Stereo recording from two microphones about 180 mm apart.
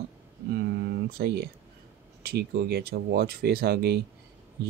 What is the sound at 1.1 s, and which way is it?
Speech, 60° right (ahead or behind).